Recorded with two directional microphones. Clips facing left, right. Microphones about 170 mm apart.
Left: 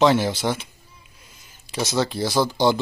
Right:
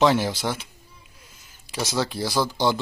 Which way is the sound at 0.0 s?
10° right (ahead or behind).